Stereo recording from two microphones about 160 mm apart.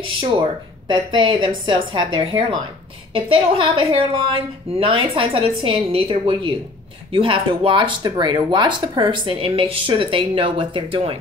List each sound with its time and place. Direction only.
0.2 s speech: 30° right (ahead or behind)